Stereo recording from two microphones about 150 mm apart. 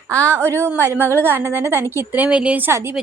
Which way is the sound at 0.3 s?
15° right (ahead or behind).